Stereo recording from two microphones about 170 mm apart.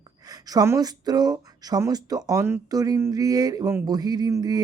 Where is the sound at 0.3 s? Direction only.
20° right (ahead or behind).